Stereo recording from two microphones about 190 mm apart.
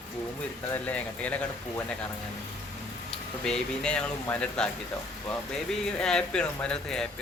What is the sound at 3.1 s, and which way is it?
Speech, 5° left (ahead or behind).